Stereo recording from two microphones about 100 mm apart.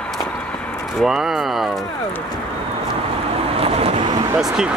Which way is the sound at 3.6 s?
80° right.